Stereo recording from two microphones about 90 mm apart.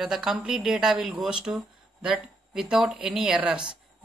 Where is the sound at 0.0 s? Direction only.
5° right (ahead or behind).